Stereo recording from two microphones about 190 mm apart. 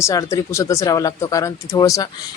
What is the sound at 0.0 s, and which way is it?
Speech, 15° left (ahead or behind).